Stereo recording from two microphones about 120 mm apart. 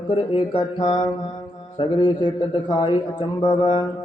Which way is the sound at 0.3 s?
45° left (ahead or behind).